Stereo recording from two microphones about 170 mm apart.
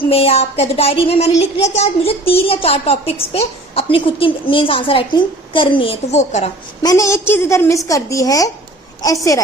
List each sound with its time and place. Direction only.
0.1 s speech: 35° left (ahead or behind)
6.8 s a woman's voice: 20° left (ahead or behind)